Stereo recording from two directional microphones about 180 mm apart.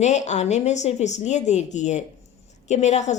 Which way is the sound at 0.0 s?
40° left (ahead or behind).